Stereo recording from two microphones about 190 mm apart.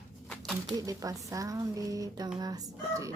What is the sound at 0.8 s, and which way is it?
Speech, 20° right (ahead or behind).